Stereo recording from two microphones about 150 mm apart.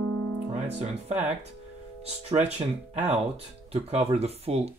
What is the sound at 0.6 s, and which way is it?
Speech, 45° right (ahead or behind).